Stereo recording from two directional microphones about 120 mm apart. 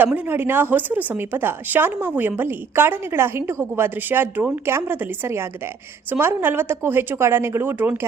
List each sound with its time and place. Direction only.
0.0 s a woman's voice: 15° right (ahead or behind)